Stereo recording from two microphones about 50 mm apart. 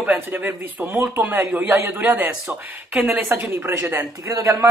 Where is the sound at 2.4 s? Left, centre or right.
Centre.